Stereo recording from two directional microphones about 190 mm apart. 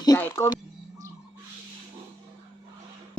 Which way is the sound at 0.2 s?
15° left (ahead or behind).